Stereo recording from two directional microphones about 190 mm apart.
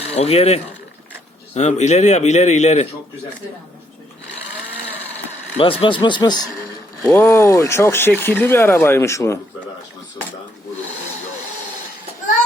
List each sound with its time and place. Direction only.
0.0 s a man's voice: 30° left (ahead or behind)
5.8 s speech: 25° left (ahead or behind)